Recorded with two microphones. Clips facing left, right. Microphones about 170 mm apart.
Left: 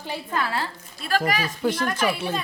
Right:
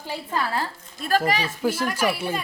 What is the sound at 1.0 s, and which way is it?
Speech, 45° right (ahead or behind).